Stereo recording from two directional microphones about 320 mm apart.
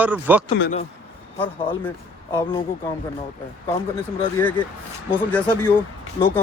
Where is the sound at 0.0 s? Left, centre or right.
Centre.